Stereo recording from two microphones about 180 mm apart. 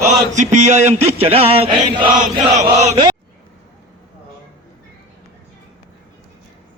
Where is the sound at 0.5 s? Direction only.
40° right (ahead or behind).